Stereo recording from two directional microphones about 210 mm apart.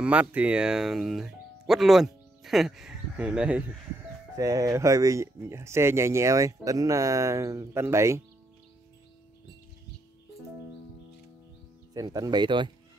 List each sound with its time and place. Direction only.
0.0 s speech: 5° right (ahead or behind)
11.9 s speech: 15° right (ahead or behind)